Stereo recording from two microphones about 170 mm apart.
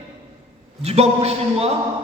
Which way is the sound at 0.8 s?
35° right (ahead or behind).